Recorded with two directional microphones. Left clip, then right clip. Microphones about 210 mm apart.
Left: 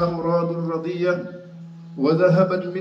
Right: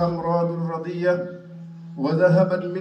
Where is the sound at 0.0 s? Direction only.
10° left (ahead or behind).